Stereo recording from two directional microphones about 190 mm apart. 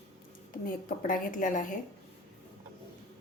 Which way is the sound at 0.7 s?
45° left (ahead or behind).